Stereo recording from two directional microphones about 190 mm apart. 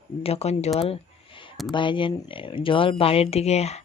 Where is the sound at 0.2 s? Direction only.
35° left (ahead or behind).